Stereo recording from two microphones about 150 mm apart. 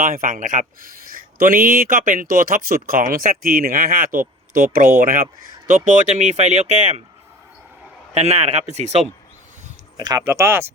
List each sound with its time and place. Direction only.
0.0 s speech: 65° right (ahead or behind)
0.8 s speech: 70° right (ahead or behind); by 7.0 s 45° right (ahead or behind)
8.1 s speech: 45° right (ahead or behind)
10.0 s speech: 25° right (ahead or behind)